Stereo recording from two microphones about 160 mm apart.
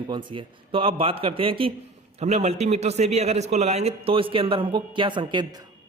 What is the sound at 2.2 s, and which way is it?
A man's voice, 45° right (ahead or behind).